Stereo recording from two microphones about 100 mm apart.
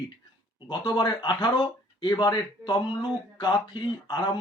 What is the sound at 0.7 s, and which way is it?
Speech, 50° left (ahead or behind).